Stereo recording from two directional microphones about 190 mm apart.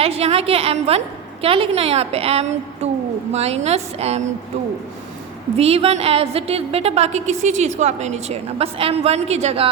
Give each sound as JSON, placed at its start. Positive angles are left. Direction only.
{"t": 0.0, "sound": "a woman's voice", "side_deg": -30}
{"t": 5.5, "sound": "a woman's voice", "side_deg": -30}